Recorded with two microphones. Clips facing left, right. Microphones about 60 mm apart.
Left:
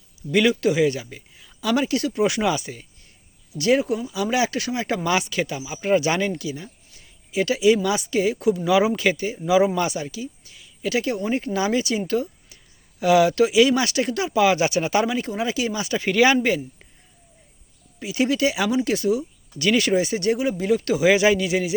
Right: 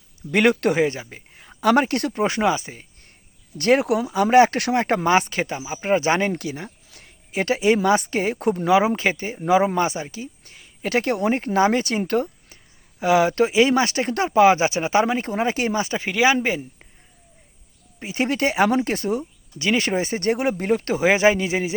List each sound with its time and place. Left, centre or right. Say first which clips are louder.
0.2 s speech: right 1 dB; right
0.9 s speech: left 3 dB; right
2.2 s speech: right 2 dB; right
3.6 s speech: right 1 dB; right
3.8 s speech: right 4 dB; right
4.1 s speech: right 10 dB; right
5.0 s speech: right 3 dB; right
8.6 s speech: right 2 dB; right
13.0 s speech: left 1 dB; right
16.0 s speech: left 2 dB; centre
18.0 s speech: left 1 dB; right
19.5 s speech: left 2 dB; right
20.7 s speech: left 2 dB; right